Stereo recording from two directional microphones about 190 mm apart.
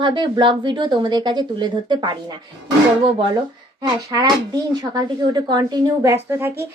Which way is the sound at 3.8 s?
20° right (ahead or behind).